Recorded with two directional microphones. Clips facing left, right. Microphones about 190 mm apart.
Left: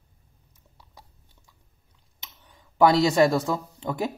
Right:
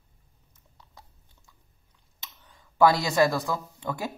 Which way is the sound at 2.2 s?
15° left (ahead or behind).